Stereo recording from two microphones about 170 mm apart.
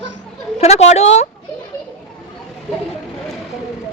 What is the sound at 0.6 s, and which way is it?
Speech, 40° left (ahead or behind).